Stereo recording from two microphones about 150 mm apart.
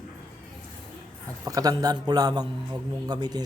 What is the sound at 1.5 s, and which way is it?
A man's voice, 25° right (ahead or behind).